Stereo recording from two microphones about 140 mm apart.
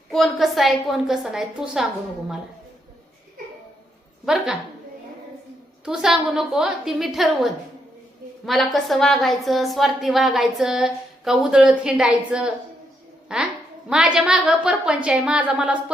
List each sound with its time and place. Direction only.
0.1 s a woman's voice: centre (ahead or behind)
4.3 s a woman's voice: centre (ahead or behind)
5.8 s a woman's voice: 5° right (ahead or behind)